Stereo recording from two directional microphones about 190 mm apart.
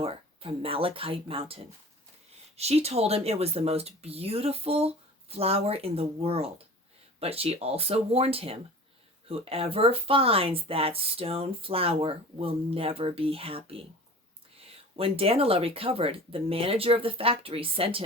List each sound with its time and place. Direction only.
0.0 s speech: 30° right (ahead or behind)